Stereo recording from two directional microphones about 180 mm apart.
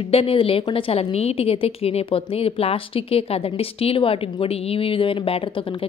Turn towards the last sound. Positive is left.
turn(degrees=30)  # may be behind; listen again after turning